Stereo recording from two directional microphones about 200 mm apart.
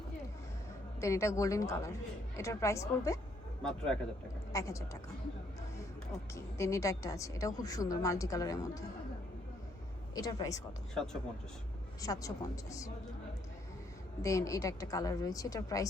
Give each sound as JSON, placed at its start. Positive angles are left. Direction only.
{"t": 1.0, "sound": "a woman's voice", "side_deg": 15}
{"t": 3.6, "sound": "a man's voice", "side_deg": 5}
{"t": 4.5, "sound": "a woman's voice", "side_deg": 15}
{"t": 6.3, "sound": "a woman's voice", "side_deg": 15}
{"t": 10.2, "sound": "a woman's voice", "side_deg": 20}
{"t": 10.9, "sound": "a man's voice", "side_deg": 5}
{"t": 12.0, "sound": "a woman's voice", "side_deg": 20}
{"t": 14.2, "sound": "a woman's voice", "side_deg": 15}